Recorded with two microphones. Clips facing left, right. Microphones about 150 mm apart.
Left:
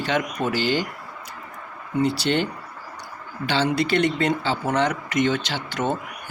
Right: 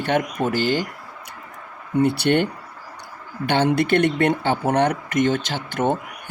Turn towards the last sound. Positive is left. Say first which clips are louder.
# right 3 dB
turn(degrees=-55)  # may be behind; listen again after turning